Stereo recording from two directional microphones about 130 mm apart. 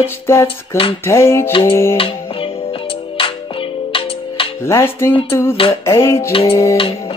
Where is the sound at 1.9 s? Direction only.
45° left (ahead or behind).